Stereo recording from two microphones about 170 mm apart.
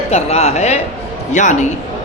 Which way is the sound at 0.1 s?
40° left (ahead or behind).